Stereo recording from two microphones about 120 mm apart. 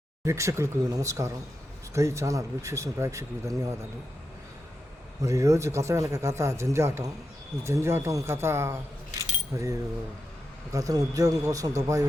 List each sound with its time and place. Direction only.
0.3 s speech: 25° right (ahead or behind)
5.2 s speech: 25° right (ahead or behind)
10.7 s speech: 30° right (ahead or behind)